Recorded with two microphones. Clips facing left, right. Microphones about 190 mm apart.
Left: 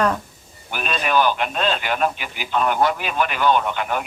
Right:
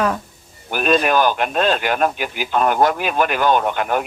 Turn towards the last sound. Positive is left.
turn(degrees=-45)  # may be behind; listen again after turning